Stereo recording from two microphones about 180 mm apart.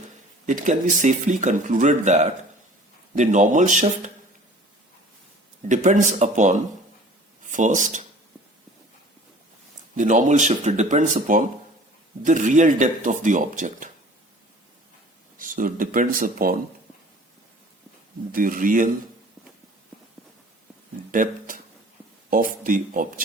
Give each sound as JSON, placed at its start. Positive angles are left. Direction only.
{"t": 0.4, "sound": "speech", "side_deg": -45}
{"t": 5.6, "sound": "speech", "side_deg": -45}
{"t": 9.9, "sound": "speech", "side_deg": -45}
{"t": 15.4, "sound": "speech", "side_deg": -50}
{"t": 18.3, "sound": "speech", "side_deg": -50}
{"t": 21.1, "sound": "a sound", "side_deg": -50}
{"t": 22.3, "sound": "speech", "side_deg": -50}